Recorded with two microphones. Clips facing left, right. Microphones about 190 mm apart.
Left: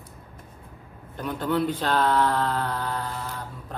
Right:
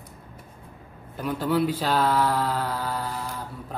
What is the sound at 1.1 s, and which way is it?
Speech, 5° right (ahead or behind).